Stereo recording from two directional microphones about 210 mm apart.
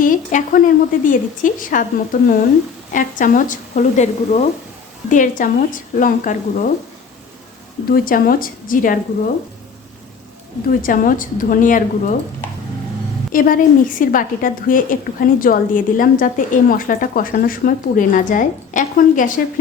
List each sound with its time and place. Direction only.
0.0 s a woman's voice: 40° left (ahead or behind)
7.9 s a woman's voice: 45° left (ahead or behind)
10.7 s a woman's voice: 40° left (ahead or behind)
13.3 s a woman's voice: 40° left (ahead or behind)